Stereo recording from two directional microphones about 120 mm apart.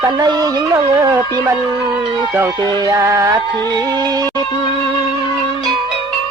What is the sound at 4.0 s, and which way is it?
Music, 35° right (ahead or behind).